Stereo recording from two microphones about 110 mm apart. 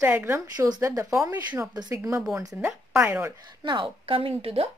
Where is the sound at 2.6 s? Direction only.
15° right (ahead or behind).